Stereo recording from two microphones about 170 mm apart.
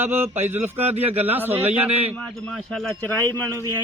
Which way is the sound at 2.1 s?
5° left (ahead or behind).